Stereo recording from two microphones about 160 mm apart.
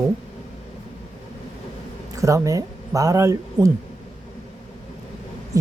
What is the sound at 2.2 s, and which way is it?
Speech, 20° right (ahead or behind).